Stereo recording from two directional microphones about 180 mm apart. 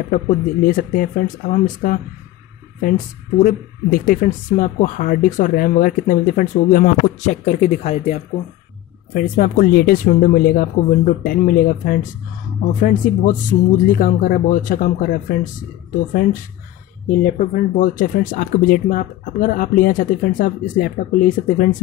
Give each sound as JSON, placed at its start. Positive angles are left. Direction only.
{"t": 0.1, "sound": "speech", "side_deg": 50}
{"t": 3.3, "sound": "speech", "side_deg": 50}
{"t": 9.1, "sound": "speech", "side_deg": 50}
{"t": 17.1, "sound": "speech", "side_deg": 50}